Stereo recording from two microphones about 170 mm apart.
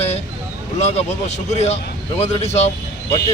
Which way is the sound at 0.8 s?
40° left (ahead or behind).